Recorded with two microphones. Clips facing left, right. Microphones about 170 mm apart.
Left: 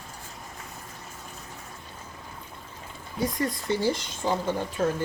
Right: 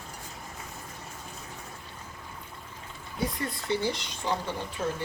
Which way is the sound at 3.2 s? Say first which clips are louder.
Left 4 dB; 45° left (ahead or behind).